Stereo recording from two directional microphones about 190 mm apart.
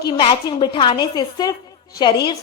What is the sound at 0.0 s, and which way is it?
A woman's voice, 25° left (ahead or behind).